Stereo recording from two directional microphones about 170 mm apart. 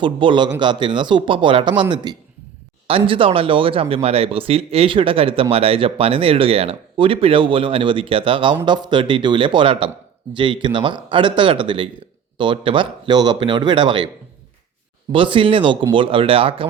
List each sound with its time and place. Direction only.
0.0 s speech: 30° right (ahead or behind)
15.1 s speech: 30° right (ahead or behind)